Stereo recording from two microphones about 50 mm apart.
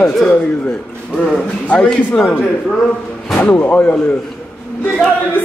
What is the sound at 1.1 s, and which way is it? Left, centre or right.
Speech, centre.